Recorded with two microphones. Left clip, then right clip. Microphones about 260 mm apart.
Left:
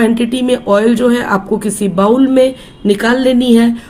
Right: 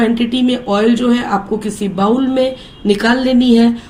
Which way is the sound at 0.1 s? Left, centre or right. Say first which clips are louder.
Left 2 dB; left.